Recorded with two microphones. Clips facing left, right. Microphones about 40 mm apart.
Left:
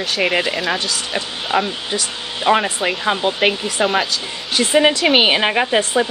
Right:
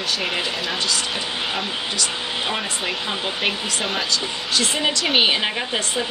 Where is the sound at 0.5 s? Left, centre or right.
Centre.